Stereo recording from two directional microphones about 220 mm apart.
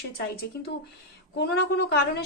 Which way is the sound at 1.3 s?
45° left (ahead or behind).